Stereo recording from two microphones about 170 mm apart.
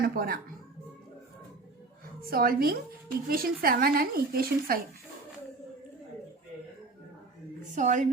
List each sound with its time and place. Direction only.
0.0 s speech: 65° right (ahead or behind)
2.3 s speech: 55° right (ahead or behind)
7.8 s a woman's voice: 45° right (ahead or behind)